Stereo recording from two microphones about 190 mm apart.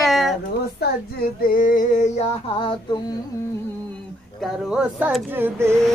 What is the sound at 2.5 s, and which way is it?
Female singing, 25° left (ahead or behind).